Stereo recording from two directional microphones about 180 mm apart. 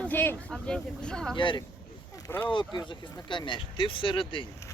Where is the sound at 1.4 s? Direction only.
25° left (ahead or behind).